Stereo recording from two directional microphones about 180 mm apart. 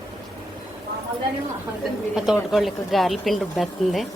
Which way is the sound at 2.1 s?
5° right (ahead or behind).